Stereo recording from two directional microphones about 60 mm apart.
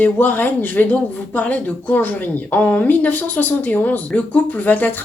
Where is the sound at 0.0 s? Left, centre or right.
Left.